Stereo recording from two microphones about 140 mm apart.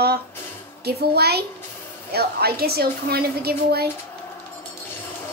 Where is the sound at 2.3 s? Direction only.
90° right.